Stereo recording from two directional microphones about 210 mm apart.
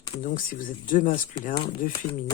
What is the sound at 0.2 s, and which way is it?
Speech, 40° left (ahead or behind).